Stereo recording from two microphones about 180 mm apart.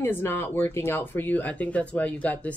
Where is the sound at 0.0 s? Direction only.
10° left (ahead or behind).